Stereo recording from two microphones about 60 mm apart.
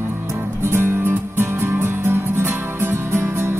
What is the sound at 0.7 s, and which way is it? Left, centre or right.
Music, right.